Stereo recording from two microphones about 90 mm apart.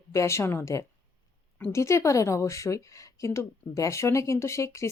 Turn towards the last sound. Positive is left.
turn(degrees=35)  # may be behind; listen again after turning